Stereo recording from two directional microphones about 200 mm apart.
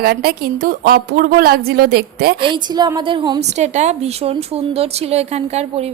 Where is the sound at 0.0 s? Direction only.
50° right (ahead or behind).